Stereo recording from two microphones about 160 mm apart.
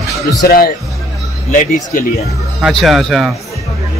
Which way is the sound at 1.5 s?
50° left (ahead or behind).